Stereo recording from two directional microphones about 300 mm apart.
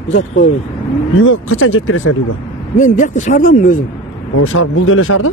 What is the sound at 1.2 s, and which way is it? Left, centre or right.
Speech, left.